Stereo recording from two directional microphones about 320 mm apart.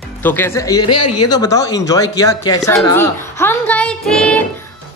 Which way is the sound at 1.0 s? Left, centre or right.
Left.